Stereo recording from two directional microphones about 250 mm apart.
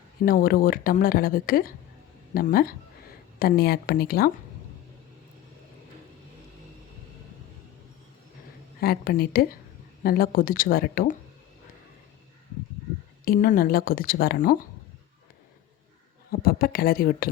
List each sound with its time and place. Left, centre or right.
0.2 s speech: left
8.8 s speech: left
13.2 s speech: left
16.3 s speech: left